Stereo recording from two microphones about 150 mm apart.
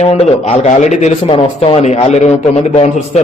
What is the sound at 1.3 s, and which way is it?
A man's voice, 35° left (ahead or behind).